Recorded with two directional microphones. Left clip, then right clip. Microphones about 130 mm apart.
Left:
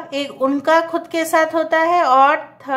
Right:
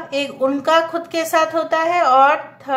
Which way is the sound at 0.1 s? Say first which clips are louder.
Even; 30° left (ahead or behind).